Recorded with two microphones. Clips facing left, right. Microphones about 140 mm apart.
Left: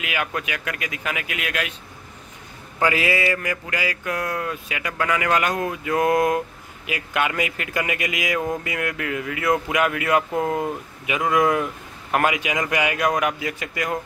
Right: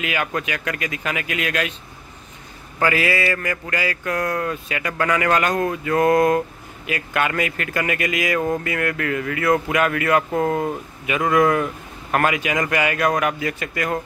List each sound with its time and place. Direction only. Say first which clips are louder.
0.0 s speech: right 3 dB; 10° left (ahead or behind)
2.8 s speech: right 1 dB; 20° left (ahead or behind)